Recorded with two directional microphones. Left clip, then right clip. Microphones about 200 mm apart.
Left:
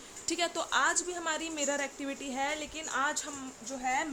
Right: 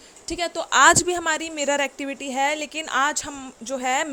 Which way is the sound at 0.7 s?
45° right (ahead or behind).